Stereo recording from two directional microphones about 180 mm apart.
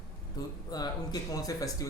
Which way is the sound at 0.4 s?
20° left (ahead or behind).